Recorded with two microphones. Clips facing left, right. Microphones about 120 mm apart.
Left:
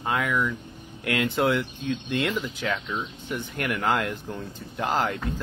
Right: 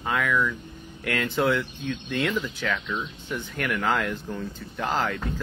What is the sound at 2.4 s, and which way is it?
Speech, 25° left (ahead or behind).